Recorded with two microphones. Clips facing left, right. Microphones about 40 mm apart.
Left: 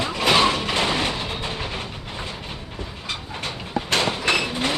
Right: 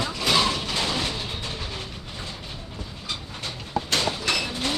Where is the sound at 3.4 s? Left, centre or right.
Left.